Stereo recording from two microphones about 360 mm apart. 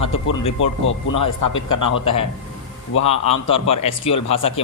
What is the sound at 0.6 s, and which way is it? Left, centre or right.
Speech, left.